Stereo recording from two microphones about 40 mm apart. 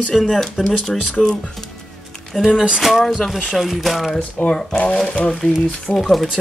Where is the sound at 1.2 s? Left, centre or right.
Left.